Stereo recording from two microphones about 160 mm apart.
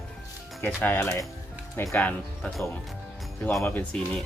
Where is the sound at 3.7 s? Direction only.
5° left (ahead or behind).